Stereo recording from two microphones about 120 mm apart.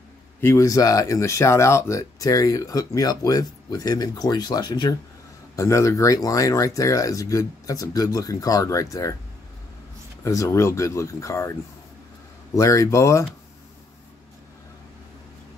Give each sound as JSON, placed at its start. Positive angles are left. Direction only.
{"t": 0.4, "sound": "speech", "side_deg": 25}
{"t": 5.6, "sound": "speech", "side_deg": 25}
{"t": 10.2, "sound": "speech", "side_deg": 25}
{"t": 12.5, "sound": "speech", "side_deg": 25}